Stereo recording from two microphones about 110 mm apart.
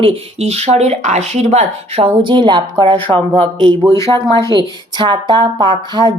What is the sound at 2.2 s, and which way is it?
Speech, 45° right (ahead or behind).